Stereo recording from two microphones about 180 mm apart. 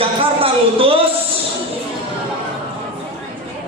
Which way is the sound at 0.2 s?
30° right (ahead or behind).